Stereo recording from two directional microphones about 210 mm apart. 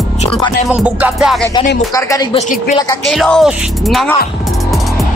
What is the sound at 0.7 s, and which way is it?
Speech, 5° right (ahead or behind).